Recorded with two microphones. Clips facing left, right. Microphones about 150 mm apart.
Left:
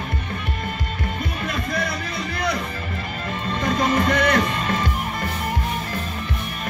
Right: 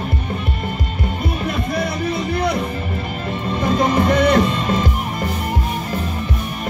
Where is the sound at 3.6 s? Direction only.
15° right (ahead or behind).